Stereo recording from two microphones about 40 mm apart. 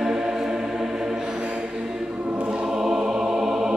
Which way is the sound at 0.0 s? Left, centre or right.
Centre.